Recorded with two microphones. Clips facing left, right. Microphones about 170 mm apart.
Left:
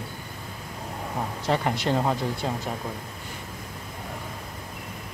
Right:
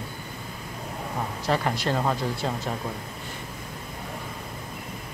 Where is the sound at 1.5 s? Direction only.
20° left (ahead or behind).